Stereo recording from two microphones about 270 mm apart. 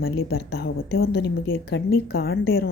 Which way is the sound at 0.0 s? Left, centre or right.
Left.